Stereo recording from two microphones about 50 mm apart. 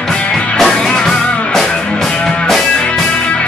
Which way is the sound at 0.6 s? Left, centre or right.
Centre.